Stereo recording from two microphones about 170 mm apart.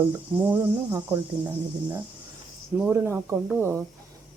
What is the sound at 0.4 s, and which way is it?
Speech, 10° right (ahead or behind).